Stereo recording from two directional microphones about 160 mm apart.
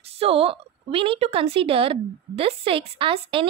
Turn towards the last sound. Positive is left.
turn(degrees=-35)  # may be behind; listen again after turning